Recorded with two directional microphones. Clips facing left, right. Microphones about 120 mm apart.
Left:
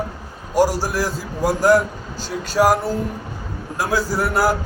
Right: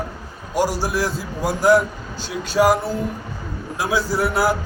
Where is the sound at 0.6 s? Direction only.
40° left (ahead or behind).